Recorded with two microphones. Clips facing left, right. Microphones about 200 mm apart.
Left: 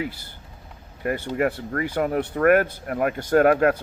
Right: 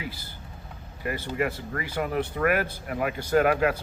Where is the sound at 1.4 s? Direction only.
50° left (ahead or behind).